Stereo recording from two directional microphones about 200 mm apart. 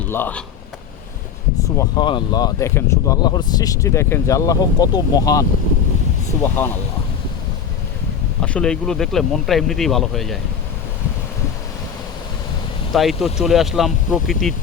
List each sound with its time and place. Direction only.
0.1 s speech: 10° left (ahead or behind)
1.6 s speech: 20° left (ahead or behind)
8.4 s speech: 5° left (ahead or behind)
12.9 s speech: centre (ahead or behind)